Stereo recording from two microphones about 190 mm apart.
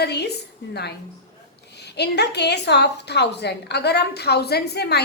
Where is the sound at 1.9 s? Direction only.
60° left (ahead or behind).